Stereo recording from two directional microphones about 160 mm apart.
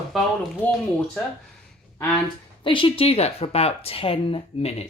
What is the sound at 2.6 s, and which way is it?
A woman's voice, 35° left (ahead or behind).